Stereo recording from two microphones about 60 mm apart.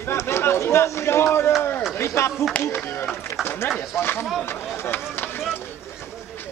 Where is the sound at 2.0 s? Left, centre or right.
Left.